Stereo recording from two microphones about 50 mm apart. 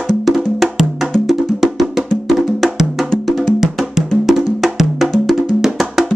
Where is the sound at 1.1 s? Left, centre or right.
Centre.